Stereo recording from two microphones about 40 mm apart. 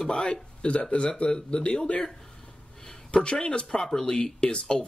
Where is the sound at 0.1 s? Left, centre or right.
Left.